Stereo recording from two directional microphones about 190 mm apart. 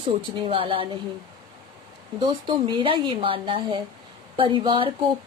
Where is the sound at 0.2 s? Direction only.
30° right (ahead or behind).